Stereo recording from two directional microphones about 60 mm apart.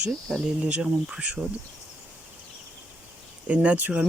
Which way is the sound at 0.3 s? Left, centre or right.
Centre.